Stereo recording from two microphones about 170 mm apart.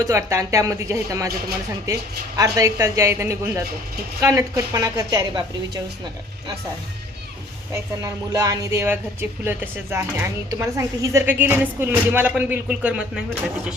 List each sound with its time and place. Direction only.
0.0 s speech: 15° right (ahead or behind)
2.3 s speech: 20° right (ahead or behind)
7.7 s speech: 20° right (ahead or behind)